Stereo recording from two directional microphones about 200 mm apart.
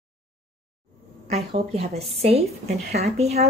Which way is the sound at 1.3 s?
30° right (ahead or behind).